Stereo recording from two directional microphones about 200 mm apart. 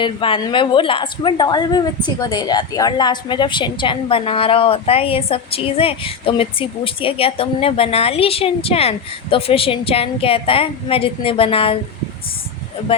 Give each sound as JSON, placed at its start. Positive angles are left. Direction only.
{"t": 0.0, "sound": "a woman's voice", "side_deg": 25}